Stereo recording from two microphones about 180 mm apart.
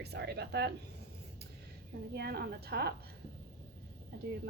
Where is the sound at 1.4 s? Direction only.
60° right (ahead or behind).